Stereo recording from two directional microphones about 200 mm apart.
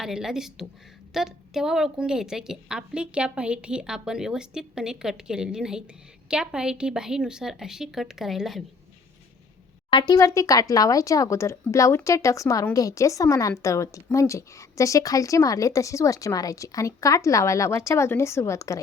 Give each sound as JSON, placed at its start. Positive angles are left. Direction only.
{"t": 0.0, "sound": "a woman's voice", "side_deg": 0}
{"t": 9.9, "sound": "a woman's voice", "side_deg": 20}